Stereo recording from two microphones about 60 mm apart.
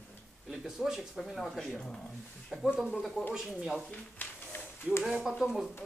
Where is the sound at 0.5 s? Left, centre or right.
Centre.